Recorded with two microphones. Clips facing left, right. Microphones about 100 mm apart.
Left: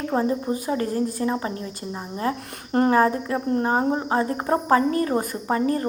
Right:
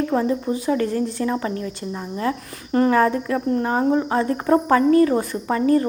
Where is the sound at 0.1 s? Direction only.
30° left (ahead or behind).